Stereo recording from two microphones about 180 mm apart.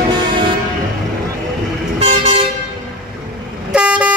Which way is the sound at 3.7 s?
5° right (ahead or behind).